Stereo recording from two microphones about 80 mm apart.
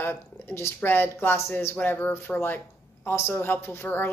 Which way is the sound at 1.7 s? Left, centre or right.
Centre.